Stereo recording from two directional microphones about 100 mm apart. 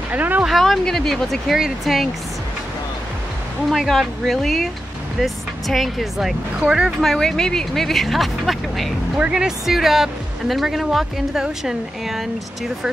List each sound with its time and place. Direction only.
0.1 s speech: 15° right (ahead or behind)
0.5 s speech: centre (ahead or behind)
3.6 s speech: centre (ahead or behind)
7.0 s speech: 5° left (ahead or behind)